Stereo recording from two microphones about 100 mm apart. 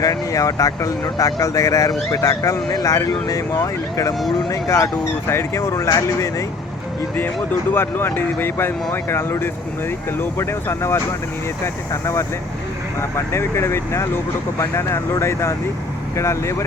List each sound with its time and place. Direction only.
0.0 s speech: 35° left (ahead or behind)
7.7 s speech: 20° left (ahead or behind)